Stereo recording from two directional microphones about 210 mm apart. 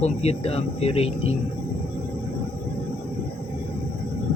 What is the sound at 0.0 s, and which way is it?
Speech, 30° left (ahead or behind).